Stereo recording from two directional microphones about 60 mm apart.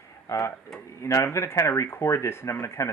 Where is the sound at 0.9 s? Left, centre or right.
Left.